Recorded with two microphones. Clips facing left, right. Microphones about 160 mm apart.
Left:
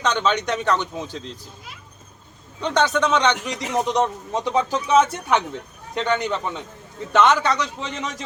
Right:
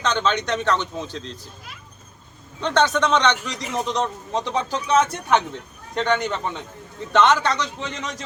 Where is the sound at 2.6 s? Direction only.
10° left (ahead or behind).